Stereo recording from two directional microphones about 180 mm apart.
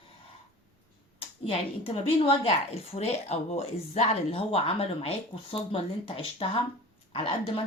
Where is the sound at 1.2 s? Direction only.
30° left (ahead or behind).